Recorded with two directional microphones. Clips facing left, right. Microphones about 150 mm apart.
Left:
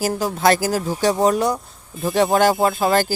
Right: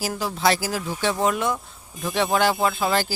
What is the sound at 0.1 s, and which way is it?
Speech, 45° left (ahead or behind).